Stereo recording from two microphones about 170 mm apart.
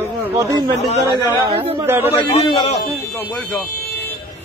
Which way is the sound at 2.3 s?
35° left (ahead or behind).